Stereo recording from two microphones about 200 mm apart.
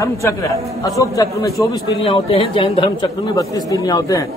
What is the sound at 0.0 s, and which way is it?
A man's voice, 15° left (ahead or behind).